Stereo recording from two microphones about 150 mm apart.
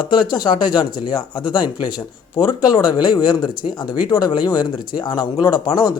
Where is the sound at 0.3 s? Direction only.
30° left (ahead or behind).